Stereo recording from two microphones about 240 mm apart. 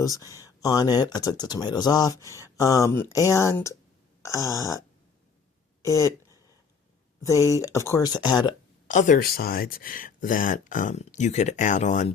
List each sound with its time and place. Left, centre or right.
0.0 s speech: centre
5.8 s speech: centre
8.9 s speech: left